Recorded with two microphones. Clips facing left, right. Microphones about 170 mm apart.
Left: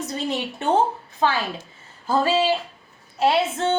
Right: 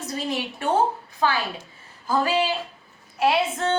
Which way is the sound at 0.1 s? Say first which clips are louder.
Right 2 dB; 25° left (ahead or behind).